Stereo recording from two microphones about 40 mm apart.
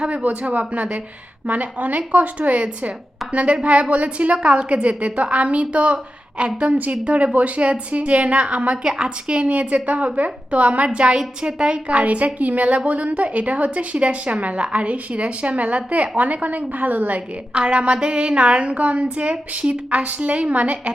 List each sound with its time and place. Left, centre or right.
0.1 s a woman's voice: right
11.9 s a woman's voice: right
17.2 s a woman's voice: right